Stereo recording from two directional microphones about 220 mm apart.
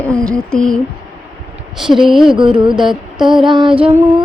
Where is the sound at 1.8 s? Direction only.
Centre (ahead or behind).